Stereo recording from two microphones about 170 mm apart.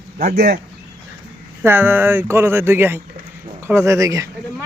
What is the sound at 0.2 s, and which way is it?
Speech, 50° right (ahead or behind).